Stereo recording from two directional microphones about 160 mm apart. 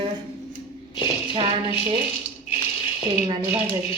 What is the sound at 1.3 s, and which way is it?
Speech, 35° right (ahead or behind).